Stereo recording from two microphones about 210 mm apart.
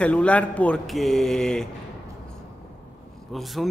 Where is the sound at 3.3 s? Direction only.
Centre (ahead or behind).